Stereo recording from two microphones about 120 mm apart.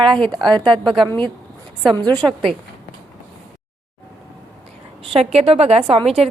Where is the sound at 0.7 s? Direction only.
40° right (ahead or behind).